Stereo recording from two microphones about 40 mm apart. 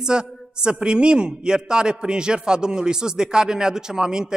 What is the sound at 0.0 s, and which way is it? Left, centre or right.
A man's voice, right.